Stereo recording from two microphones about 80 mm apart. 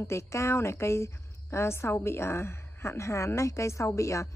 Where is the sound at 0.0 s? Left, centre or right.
Left.